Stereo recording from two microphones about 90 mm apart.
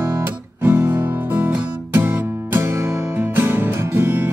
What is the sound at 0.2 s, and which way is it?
Music, 20° right (ahead or behind).